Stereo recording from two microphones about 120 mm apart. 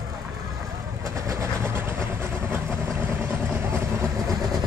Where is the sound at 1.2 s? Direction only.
20° right (ahead or behind).